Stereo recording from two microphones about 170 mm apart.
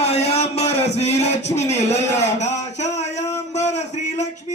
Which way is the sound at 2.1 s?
40° left (ahead or behind).